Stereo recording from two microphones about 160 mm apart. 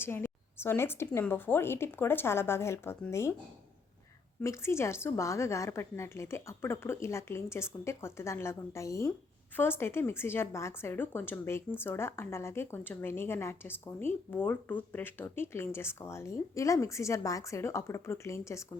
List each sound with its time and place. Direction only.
0.0 s a woman's voice: 15° left (ahead or behind)
4.4 s a woman's voice: 15° left (ahead or behind)